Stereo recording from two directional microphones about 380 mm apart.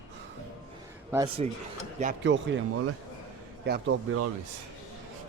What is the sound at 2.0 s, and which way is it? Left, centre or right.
Speech, right.